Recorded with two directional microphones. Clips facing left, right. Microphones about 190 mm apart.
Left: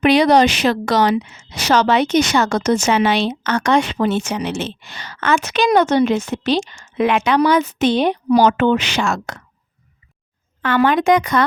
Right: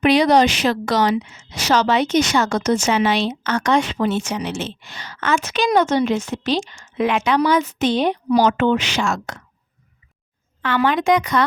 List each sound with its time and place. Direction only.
0.0 s a woman's voice: 65° left (ahead or behind)
10.6 s a woman's voice: 50° left (ahead or behind)